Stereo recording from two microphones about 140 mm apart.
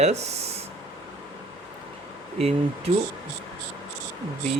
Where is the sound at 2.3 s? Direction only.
45° right (ahead or behind).